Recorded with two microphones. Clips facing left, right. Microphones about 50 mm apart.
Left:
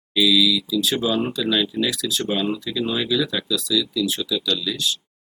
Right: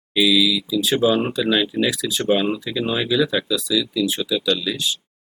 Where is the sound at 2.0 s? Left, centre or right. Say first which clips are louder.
Right 4 dB; centre.